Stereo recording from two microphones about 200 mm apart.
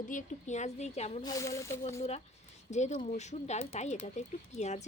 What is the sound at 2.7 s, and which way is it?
Speech, 35° left (ahead or behind).